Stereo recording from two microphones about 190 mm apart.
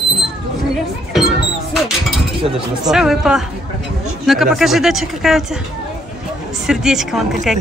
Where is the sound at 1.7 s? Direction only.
Centre (ahead or behind).